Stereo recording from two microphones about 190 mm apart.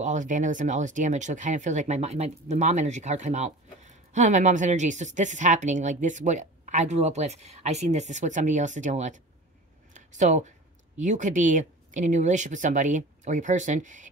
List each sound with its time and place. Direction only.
0.0 s speech: 40° right (ahead or behind)